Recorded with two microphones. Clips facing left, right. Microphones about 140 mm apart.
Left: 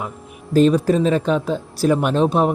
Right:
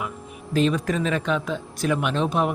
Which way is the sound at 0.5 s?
40° left (ahead or behind).